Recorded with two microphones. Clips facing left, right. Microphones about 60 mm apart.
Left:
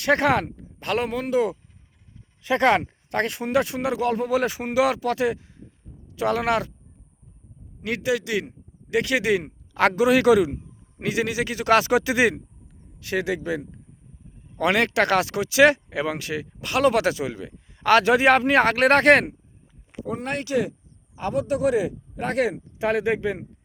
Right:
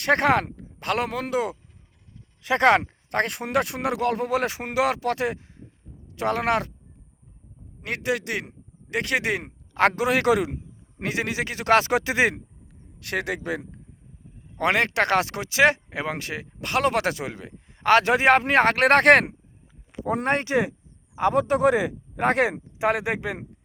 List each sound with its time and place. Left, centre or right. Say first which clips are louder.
0.0 s speech: even; right
0.5 s a man's voice: left 1 dB; right
7.9 s speech: left 2 dB; right
13.0 s speech: left 3 dB; right
14.6 s speech: left 1 dB; right
20.2 s speech: right 1 dB; right